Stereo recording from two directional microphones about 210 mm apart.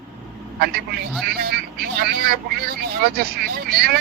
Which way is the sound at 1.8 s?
45° right (ahead or behind).